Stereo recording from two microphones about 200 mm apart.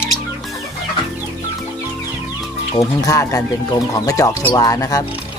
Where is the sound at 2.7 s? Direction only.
15° left (ahead or behind).